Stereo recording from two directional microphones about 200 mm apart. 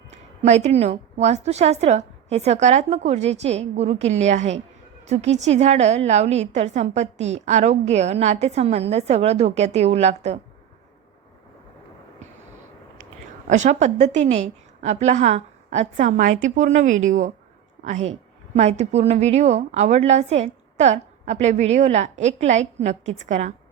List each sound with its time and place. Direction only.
0.1 s a woman's voice: 35° right (ahead or behind)
13.5 s a woman's voice: 35° right (ahead or behind)